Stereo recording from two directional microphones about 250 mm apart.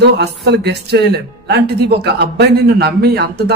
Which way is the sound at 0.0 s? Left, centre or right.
Right.